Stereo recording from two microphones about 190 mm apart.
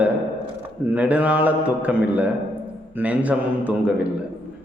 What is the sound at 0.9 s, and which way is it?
A man's voice, 10° right (ahead or behind).